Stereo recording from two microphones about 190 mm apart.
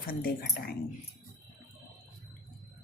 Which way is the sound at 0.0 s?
50° left (ahead or behind).